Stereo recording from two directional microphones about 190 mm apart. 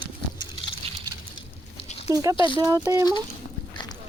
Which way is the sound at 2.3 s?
25° left (ahead or behind).